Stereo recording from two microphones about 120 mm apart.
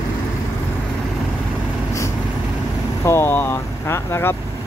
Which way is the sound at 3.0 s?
20° left (ahead or behind).